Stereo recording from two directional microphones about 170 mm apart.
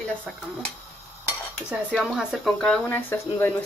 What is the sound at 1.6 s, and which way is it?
Speech, 5° right (ahead or behind).